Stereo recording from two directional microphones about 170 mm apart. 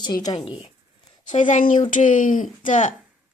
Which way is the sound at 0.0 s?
25° left (ahead or behind).